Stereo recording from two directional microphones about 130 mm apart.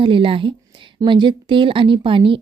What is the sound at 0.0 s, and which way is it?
A woman's voice, 40° right (ahead or behind).